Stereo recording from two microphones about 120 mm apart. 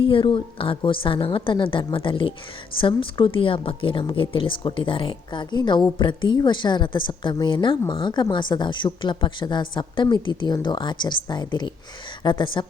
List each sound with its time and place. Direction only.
0.0 s a woman's voice: 45° left (ahead or behind)